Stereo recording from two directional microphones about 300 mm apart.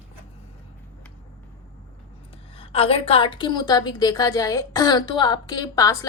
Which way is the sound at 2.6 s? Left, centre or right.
Centre.